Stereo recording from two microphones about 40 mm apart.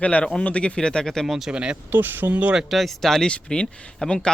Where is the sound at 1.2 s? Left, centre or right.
Centre.